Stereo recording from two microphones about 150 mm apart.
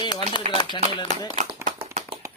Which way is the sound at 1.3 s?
50° right (ahead or behind).